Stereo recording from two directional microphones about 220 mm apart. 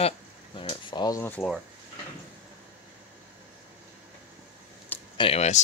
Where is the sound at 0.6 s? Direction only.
25° left (ahead or behind).